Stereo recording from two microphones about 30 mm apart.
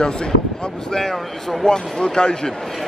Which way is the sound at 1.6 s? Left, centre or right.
Left.